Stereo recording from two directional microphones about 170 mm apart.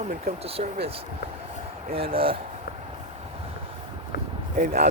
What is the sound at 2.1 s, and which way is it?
Speech, 35° right (ahead or behind).